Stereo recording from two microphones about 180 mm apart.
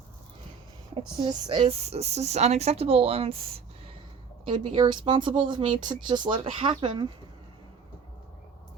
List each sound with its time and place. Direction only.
1.2 s speech: 30° right (ahead or behind)